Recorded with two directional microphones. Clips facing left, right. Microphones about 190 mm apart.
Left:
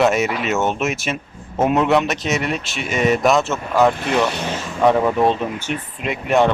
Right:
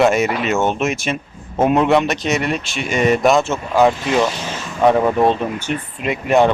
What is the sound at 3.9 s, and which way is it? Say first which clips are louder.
Speech: right 2 dB; 60° left (ahead or behind).